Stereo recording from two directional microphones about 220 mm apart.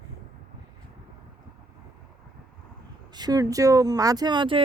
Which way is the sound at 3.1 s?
15° right (ahead or behind).